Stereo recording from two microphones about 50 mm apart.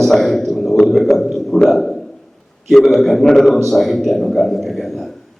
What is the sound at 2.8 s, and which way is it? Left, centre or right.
A man's voice, centre.